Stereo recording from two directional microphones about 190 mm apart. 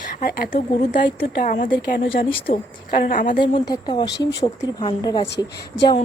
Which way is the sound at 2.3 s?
30° left (ahead or behind).